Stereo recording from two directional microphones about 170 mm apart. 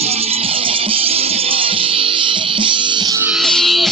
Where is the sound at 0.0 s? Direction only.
35° right (ahead or behind).